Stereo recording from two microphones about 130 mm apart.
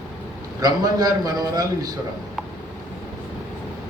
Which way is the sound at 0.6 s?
30° right (ahead or behind).